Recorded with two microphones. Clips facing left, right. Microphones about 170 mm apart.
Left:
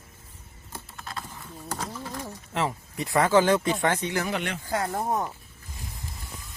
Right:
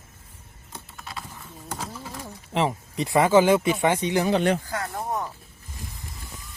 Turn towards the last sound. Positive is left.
turn(degrees=25)  # may be behind; listen again after turning